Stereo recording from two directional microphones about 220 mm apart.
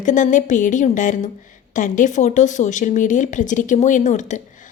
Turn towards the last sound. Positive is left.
turn(degrees=35)  # may be behind; listen again after turning